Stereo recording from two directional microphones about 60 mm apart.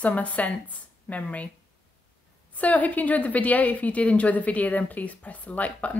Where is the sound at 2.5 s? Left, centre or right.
Left.